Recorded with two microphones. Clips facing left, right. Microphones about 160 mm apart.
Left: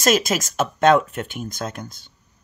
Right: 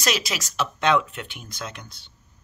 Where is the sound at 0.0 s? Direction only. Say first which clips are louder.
Left 8 dB; 45° left (ahead or behind).